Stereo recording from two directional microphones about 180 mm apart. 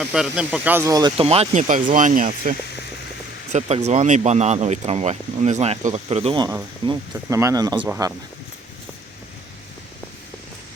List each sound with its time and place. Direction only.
0.0 s speech: 5° right (ahead or behind); by 1.6 s 35° right (ahead or behind)
1.6 s speech: 45° right (ahead or behind); by 8.1 s 20° right (ahead or behind)